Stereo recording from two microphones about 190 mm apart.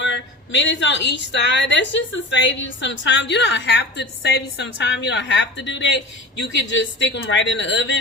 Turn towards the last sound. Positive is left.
turn(degrees=70)  # may be behind; listen again after turning